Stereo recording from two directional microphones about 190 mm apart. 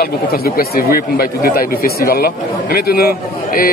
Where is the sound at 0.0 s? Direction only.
55° left (ahead or behind).